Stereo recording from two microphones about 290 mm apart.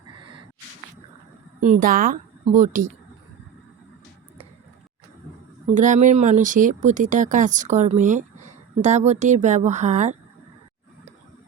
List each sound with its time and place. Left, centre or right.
1.6 s speech: right
5.7 s speech: right